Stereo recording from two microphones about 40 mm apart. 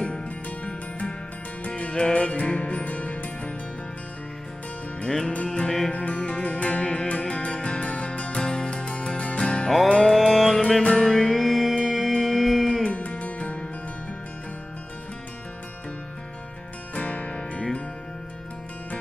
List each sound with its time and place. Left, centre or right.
0.0 s music: left
5.0 s music: centre
10.8 s music: left
11.1 s music: centre
11.3 s music: centre
12.9 s music: left
16.9 s music: left